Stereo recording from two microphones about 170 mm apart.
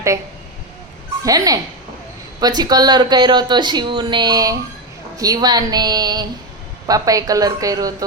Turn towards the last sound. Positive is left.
turn(degrees=-20)  # may be behind; listen again after turning